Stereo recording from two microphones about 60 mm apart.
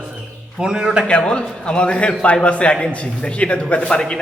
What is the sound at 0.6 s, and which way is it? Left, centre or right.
Speech, centre.